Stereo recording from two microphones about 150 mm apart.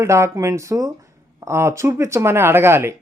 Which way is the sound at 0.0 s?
20° right (ahead or behind).